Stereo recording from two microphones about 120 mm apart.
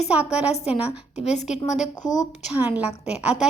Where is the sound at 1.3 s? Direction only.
75° left (ahead or behind).